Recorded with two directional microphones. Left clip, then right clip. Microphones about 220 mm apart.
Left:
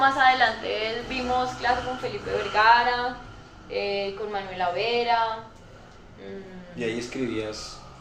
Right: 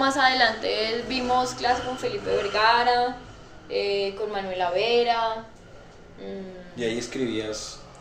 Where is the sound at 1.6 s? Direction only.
55° right (ahead or behind).